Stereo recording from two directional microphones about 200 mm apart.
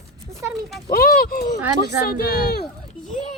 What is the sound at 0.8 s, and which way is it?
Speech, 50° left (ahead or behind).